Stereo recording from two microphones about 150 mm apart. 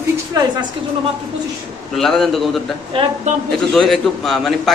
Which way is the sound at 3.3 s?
50° right (ahead or behind).